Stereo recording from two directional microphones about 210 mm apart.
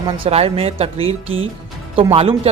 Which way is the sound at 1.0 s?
70° right (ahead or behind).